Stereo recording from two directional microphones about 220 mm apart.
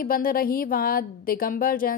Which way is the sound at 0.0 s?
40° left (ahead or behind).